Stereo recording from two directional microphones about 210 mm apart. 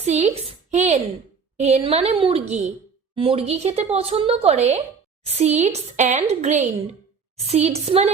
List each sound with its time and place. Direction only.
0.0 s a woman's voice: 30° right (ahead or behind)